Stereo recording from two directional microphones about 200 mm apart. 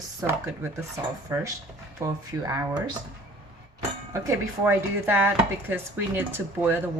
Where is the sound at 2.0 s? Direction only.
15° right (ahead or behind).